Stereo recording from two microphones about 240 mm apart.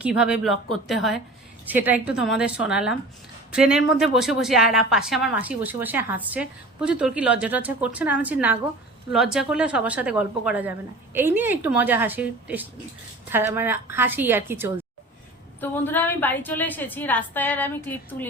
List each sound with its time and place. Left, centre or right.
0.0 s a woman's voice: centre
15.7 s a woman's voice: centre